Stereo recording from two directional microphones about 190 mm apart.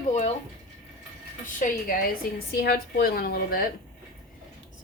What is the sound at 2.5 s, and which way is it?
Speech, 55° left (ahead or behind).